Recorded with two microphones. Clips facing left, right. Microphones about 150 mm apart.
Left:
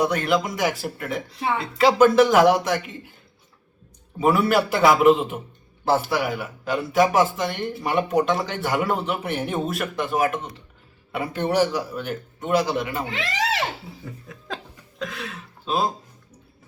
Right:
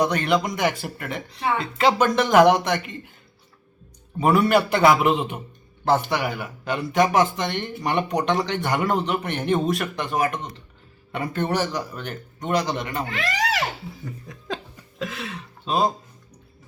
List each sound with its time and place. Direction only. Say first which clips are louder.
0.0 s speech: even; 5° left (ahead or behind)
4.2 s speech: right 1 dB; centre (ahead or behind)
13.1 s speech: even; 25° left (ahead or behind)
14.0 s speech: right 2 dB; centre (ahead or behind)